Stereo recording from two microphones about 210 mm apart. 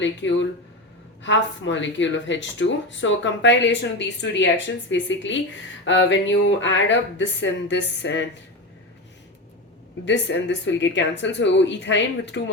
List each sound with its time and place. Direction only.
0.0 s speech: 60° left (ahead or behind)
10.1 s speech: 60° left (ahead or behind)